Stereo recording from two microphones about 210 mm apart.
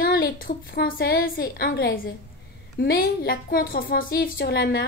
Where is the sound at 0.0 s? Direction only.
45° left (ahead or behind).